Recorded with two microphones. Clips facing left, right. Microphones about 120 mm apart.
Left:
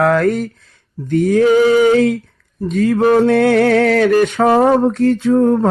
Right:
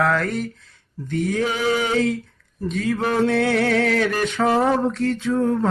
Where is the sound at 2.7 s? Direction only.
45° left (ahead or behind).